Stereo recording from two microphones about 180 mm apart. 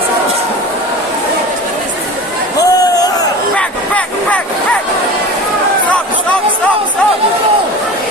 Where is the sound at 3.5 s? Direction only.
5° left (ahead or behind).